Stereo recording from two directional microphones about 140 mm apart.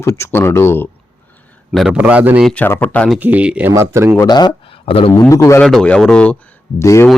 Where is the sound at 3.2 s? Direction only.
10° right (ahead or behind).